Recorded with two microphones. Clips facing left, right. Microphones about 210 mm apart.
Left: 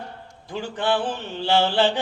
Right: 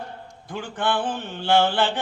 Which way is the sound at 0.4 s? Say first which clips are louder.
Left 1 dB; 50° right (ahead or behind).